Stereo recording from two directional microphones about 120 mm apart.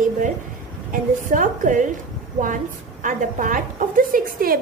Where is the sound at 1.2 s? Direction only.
90° right.